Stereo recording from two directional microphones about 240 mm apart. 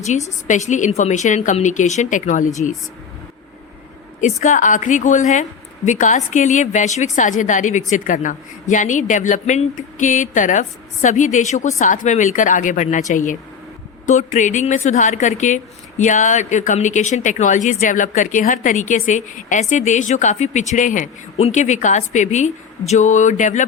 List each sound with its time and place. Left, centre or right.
0.0 s a woman's voice: left
4.2 s a woman's voice: left